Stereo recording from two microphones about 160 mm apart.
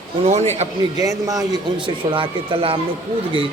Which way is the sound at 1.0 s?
20° right (ahead or behind).